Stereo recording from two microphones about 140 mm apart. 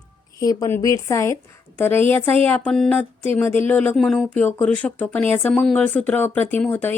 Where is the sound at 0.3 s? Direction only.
25° left (ahead or behind).